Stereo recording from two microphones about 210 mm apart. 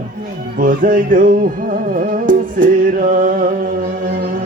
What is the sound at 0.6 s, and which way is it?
Music, 40° right (ahead or behind).